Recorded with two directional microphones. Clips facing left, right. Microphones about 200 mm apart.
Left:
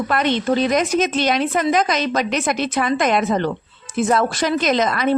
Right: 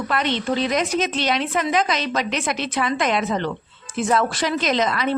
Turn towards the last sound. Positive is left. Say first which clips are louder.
# left 3 dB
turn(degrees=45)  # may be behind; listen again after turning